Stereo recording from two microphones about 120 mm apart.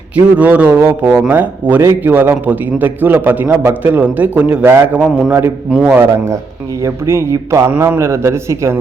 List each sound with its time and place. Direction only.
0.3 s a man's voice: 10° right (ahead or behind)